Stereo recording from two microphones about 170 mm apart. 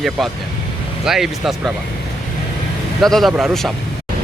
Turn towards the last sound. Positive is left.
turn(degrees=0)  # may be behind; listen again after turning